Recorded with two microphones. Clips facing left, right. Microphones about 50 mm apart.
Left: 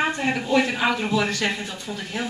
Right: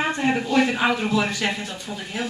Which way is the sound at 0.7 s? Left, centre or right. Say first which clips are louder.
Right 1 dB; centre.